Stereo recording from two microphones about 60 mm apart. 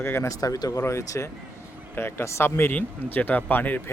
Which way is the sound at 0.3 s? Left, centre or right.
Left.